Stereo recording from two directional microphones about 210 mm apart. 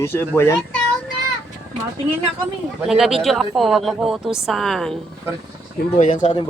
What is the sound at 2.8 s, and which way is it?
Speech, centre (ahead or behind).